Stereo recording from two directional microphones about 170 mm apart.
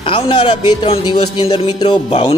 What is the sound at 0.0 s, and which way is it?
A man's voice, 30° left (ahead or behind).